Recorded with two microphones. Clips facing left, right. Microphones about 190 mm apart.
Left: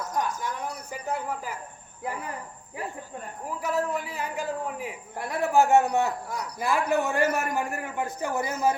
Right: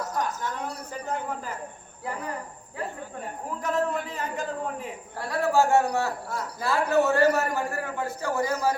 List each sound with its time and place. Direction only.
1.0 s a man's voice: 10° left (ahead or behind)
3.6 s a man's voice: 10° left (ahead or behind)